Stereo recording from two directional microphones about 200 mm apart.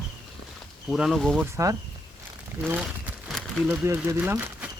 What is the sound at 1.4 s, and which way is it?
Speech, 15° right (ahead or behind).